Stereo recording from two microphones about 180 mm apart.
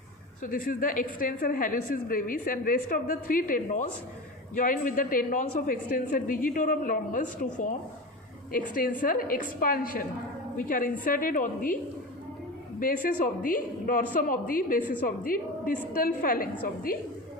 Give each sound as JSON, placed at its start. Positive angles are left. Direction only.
{"t": 0.4, "sound": "a woman's voice", "side_deg": 50}
{"t": 8.5, "sound": "a woman's voice", "side_deg": 50}
{"t": 12.8, "sound": "a woman's voice", "side_deg": 50}